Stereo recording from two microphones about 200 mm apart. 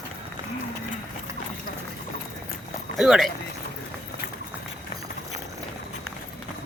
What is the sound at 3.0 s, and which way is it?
Speech, centre (ahead or behind).